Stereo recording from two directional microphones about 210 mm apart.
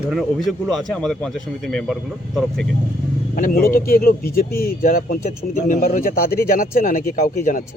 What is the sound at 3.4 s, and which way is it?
Speech, 40° left (ahead or behind).